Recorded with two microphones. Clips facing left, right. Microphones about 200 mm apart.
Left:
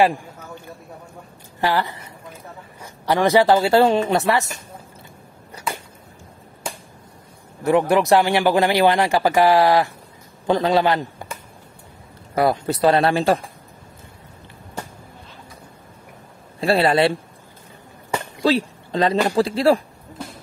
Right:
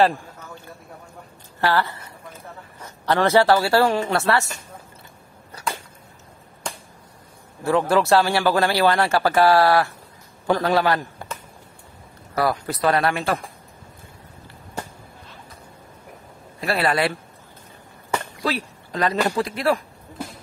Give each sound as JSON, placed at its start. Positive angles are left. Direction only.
{"t": 1.6, "sound": "speech", "side_deg": 15}
{"t": 7.6, "sound": "a man's voice", "side_deg": 15}
{"t": 12.4, "sound": "speech", "side_deg": 25}
{"t": 16.5, "sound": "speech", "side_deg": 30}
{"t": 18.4, "sound": "speech", "side_deg": 25}